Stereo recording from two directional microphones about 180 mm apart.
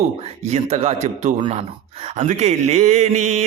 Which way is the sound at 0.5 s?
35° right (ahead or behind).